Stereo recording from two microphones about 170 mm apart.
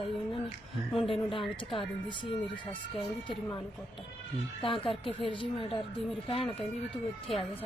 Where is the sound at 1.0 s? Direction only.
30° left (ahead or behind).